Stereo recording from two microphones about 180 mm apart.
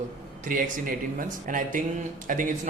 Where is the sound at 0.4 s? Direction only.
50° right (ahead or behind).